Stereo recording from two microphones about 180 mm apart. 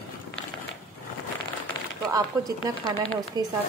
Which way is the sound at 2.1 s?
20° right (ahead or behind).